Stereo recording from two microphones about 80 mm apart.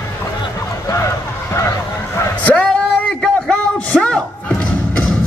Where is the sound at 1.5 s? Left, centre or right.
Left.